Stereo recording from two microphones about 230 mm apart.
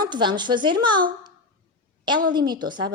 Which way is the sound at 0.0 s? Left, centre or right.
Centre.